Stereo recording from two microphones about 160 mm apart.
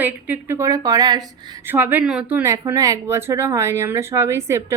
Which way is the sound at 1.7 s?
10° right (ahead or behind).